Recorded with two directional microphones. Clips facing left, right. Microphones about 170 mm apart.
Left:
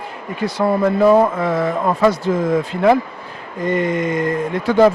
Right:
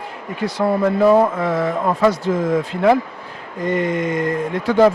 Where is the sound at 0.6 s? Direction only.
25° left (ahead or behind).